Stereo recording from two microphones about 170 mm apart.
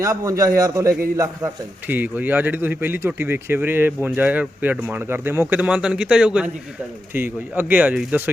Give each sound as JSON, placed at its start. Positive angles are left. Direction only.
{"t": 0.0, "sound": "a man's voice", "side_deg": -20}